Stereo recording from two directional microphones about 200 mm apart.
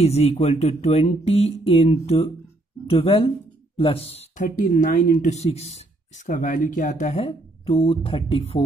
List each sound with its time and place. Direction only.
0.0 s speech: 30° left (ahead or behind)